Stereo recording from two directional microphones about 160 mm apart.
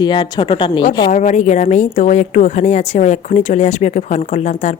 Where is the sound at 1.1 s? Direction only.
50° left (ahead or behind).